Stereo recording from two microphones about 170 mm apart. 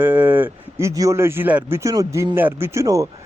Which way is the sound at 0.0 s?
10° right (ahead or behind).